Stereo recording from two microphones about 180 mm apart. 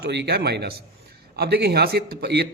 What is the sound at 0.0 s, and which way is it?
A man's voice, 65° right (ahead or behind).